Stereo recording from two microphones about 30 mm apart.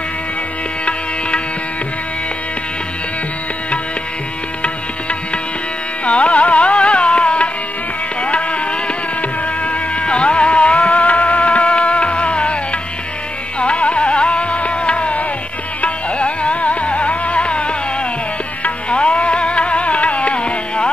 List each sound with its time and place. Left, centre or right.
6.0 s music: left
9.7 s music: left
13.6 s music: left
18.9 s music: left